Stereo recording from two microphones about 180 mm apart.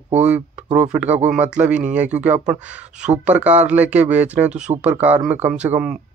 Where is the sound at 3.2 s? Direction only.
10° right (ahead or behind).